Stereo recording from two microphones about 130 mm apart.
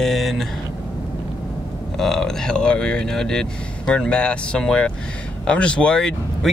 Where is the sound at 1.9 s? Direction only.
5° left (ahead or behind).